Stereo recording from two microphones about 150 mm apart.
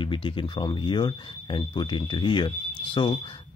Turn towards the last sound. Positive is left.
turn(degrees=35)  # may be behind; listen again after turning